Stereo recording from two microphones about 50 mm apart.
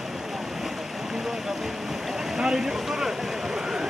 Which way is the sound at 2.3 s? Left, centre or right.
Centre.